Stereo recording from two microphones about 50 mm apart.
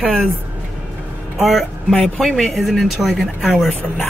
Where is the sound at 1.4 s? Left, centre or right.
Centre.